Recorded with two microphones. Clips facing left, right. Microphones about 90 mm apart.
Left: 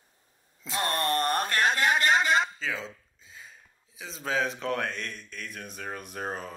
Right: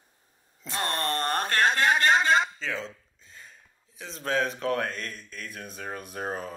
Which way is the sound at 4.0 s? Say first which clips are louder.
Right 1 dB; centre (ahead or behind).